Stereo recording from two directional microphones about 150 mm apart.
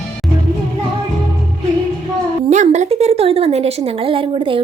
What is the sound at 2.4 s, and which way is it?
A woman's voice, 50° right (ahead or behind).